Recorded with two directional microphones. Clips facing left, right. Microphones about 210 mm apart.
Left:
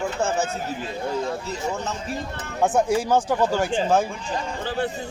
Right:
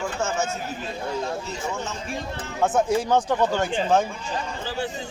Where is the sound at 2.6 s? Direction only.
10° left (ahead or behind).